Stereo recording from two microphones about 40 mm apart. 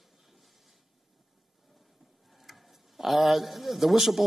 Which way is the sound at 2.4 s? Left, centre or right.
Centre.